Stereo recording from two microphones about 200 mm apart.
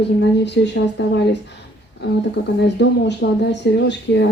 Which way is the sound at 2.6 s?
60° left (ahead or behind).